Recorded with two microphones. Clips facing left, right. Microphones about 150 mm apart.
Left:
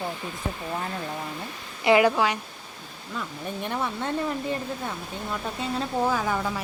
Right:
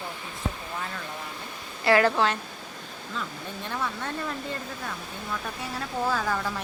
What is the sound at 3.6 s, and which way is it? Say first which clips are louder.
Speech: left 3 dB; 20° left (ahead or behind).